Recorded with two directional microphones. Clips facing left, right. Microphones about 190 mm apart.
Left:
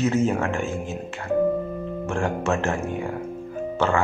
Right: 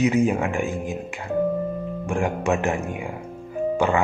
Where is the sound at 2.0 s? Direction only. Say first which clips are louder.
Right 2 dB; 15° right (ahead or behind).